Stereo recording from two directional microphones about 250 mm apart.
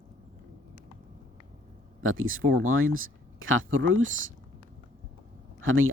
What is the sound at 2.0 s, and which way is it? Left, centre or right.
Speech, right.